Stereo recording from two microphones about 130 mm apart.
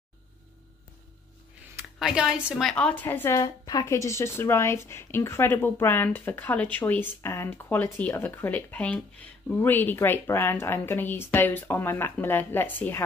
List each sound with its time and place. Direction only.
2.0 s speech: 5° right (ahead or behind)
2.7 s a woman's voice: 10° left (ahead or behind)